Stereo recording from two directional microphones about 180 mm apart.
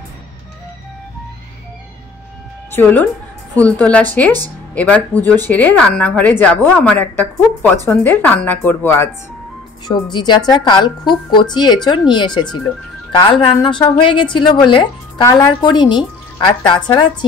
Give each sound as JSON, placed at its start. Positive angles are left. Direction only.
{"t": 2.7, "sound": "a woman's voice", "side_deg": 10}
{"t": 9.8, "sound": "a woman's voice", "side_deg": 25}
{"t": 13.1, "sound": "a woman's voice", "side_deg": 25}